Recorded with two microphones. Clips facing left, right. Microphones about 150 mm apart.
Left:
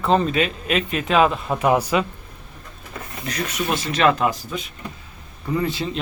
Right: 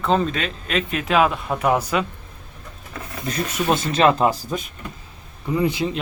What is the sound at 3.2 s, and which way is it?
Speech, 30° right (ahead or behind).